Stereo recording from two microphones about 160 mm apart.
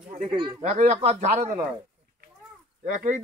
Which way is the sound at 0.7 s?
45° right (ahead or behind).